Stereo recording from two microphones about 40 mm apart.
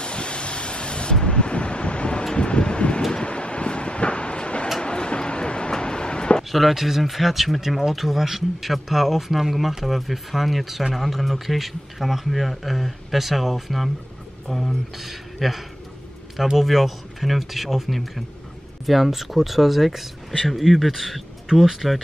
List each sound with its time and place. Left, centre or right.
0.0 s waves: left
1.2 s vehicle: left
2.3 s wind: left
3.1 s vehicle: left
4.8 s a sound: left
6.5 s speech: centre